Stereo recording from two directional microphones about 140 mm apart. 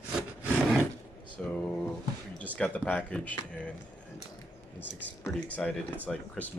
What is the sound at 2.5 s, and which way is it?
Speech, 10° left (ahead or behind).